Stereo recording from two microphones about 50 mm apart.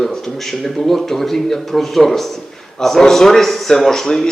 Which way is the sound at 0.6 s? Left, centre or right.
Centre.